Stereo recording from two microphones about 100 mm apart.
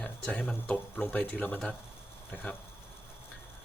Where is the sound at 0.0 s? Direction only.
10° left (ahead or behind).